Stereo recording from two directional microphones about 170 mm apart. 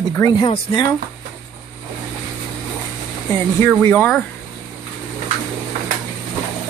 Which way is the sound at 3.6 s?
10° left (ahead or behind).